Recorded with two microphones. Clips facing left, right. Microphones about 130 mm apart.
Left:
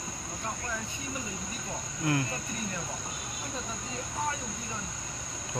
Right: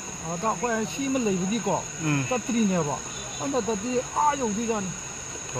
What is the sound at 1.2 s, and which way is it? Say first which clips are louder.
Cricket: right 14 dB; 90° right.